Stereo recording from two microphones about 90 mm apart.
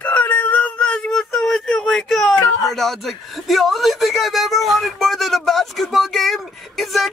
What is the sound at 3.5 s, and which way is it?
Speech, centre (ahead or behind).